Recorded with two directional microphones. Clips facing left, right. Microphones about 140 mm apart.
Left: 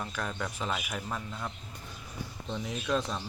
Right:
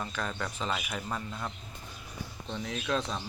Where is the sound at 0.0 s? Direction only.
5° left (ahead or behind).